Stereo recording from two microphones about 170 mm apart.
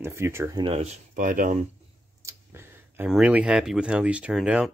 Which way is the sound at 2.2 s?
15° right (ahead or behind).